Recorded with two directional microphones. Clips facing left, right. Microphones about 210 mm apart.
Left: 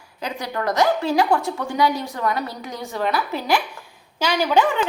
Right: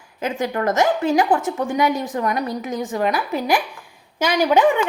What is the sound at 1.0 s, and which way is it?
A woman's voice, 15° right (ahead or behind).